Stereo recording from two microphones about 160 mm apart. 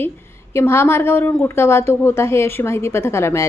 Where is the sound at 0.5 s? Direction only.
15° left (ahead or behind).